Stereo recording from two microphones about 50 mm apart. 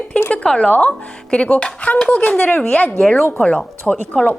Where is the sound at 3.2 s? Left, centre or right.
Left.